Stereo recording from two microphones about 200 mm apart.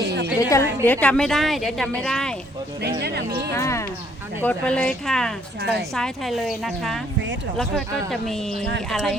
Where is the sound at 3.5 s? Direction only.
15° left (ahead or behind).